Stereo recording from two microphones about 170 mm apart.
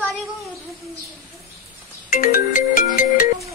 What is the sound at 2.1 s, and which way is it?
Ringtone, 55° left (ahead or behind).